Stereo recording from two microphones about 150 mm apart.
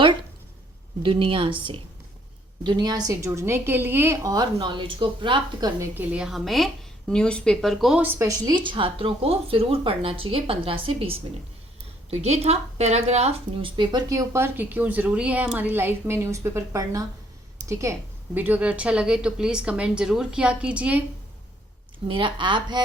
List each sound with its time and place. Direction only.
1.0 s a woman's voice: 35° right (ahead or behind)
5.9 s speech: 10° right (ahead or behind)
8.0 s a woman's voice: 20° right (ahead or behind)
22.0 s a woman's voice: 35° right (ahead or behind)